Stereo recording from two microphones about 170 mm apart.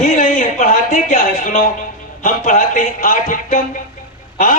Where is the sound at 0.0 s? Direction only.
50° left (ahead or behind).